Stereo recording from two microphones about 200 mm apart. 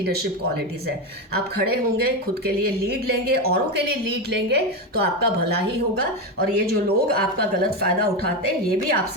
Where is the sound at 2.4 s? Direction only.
50° right (ahead or behind).